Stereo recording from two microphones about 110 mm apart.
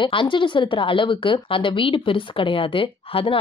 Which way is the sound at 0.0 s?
50° left (ahead or behind).